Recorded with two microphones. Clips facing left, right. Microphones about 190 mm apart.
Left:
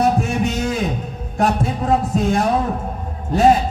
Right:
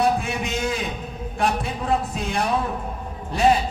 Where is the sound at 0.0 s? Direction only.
40° left (ahead or behind).